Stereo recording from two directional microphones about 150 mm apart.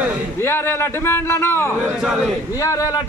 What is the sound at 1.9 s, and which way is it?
Speech, centre (ahead or behind).